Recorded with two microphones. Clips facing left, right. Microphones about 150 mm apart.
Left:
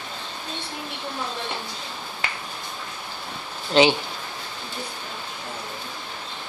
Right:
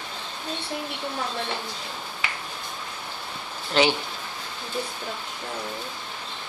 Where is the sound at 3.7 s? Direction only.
20° left (ahead or behind).